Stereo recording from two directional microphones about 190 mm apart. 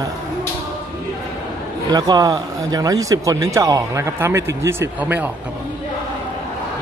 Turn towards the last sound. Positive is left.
turn(degrees=-10)  # may be behind; listen again after turning